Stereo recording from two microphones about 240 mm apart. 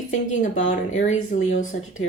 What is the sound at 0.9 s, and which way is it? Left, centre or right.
Speech, left.